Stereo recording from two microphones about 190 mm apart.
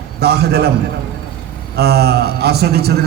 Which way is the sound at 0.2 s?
60° right (ahead or behind).